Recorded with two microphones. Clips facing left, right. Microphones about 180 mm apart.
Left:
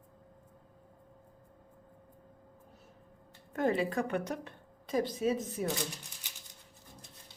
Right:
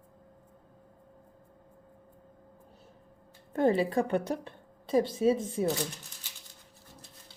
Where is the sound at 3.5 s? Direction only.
30° right (ahead or behind).